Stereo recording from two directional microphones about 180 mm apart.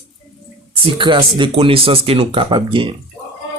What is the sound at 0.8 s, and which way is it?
Speech, 30° right (ahead or behind).